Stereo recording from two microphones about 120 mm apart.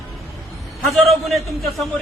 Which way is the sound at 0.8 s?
Centre (ahead or behind).